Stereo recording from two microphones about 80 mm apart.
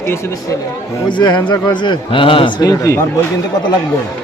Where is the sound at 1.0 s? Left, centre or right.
Left.